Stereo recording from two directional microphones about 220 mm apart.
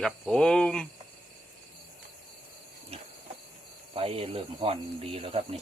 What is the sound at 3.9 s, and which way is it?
Speech, 25° right (ahead or behind).